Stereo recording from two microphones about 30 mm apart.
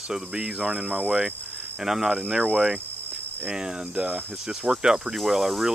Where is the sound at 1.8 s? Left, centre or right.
Centre.